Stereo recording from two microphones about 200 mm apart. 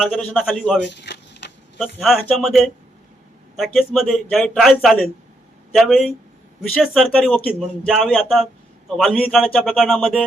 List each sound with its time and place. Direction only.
0.0 s speech: centre (ahead or behind)
0.9 s a sound: 60° left (ahead or behind)
1.8 s speech: centre (ahead or behind)